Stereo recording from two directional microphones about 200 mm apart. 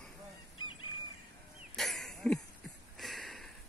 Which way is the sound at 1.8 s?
Centre (ahead or behind).